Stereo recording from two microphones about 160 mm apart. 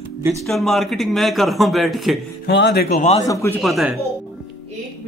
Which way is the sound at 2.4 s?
90° left.